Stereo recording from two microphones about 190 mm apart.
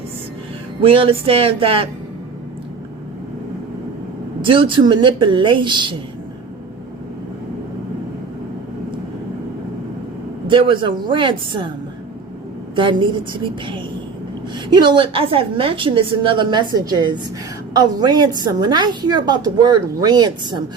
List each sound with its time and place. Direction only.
0.8 s a woman's voice: 30° right (ahead or behind)
4.4 s a woman's voice: 25° right (ahead or behind)
10.4 s a woman's voice: 25° right (ahead or behind)
12.7 s a woman's voice: 25° right (ahead or behind)